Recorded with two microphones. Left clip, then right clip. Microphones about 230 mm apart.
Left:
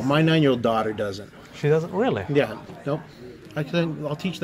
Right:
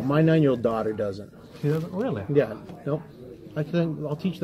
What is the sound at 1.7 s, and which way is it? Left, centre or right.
Speech, left.